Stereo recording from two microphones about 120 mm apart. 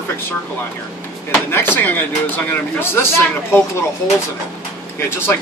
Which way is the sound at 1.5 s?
20° left (ahead or behind).